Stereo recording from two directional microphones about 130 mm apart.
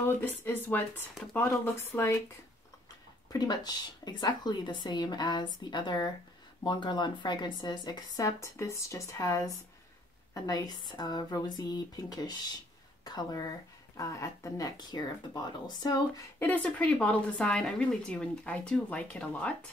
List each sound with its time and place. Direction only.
0.0 s speech: 15° left (ahead or behind)
3.3 s a woman's voice: 30° left (ahead or behind)
16.3 s speech: 10° left (ahead or behind)